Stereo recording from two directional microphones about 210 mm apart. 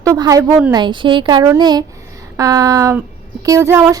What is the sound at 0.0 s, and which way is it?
Speech, 15° right (ahead or behind).